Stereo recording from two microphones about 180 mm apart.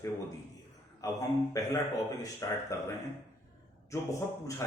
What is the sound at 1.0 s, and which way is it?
A man's voice, 20° left (ahead or behind).